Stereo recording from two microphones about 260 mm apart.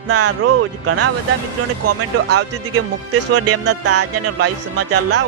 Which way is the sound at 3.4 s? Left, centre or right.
Right.